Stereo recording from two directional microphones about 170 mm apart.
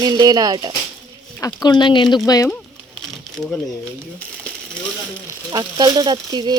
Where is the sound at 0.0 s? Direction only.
25° right (ahead or behind).